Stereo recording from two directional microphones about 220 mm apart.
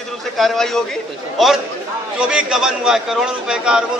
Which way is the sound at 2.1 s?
5° right (ahead or behind).